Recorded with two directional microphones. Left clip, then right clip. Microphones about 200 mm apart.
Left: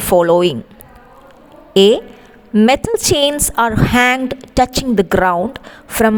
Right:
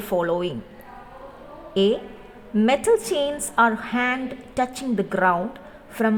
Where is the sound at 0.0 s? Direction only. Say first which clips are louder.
Left 12 dB; 40° left (ahead or behind).